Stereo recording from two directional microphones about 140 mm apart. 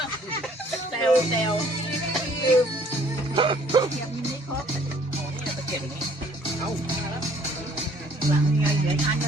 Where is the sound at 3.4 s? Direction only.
35° right (ahead or behind).